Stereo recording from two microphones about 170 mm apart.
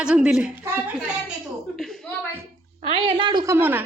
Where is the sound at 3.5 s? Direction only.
10° right (ahead or behind).